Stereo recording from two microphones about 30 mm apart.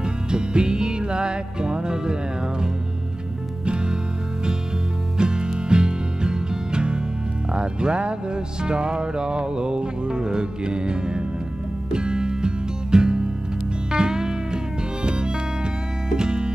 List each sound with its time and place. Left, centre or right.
0.0 s music: right
5.1 s music: right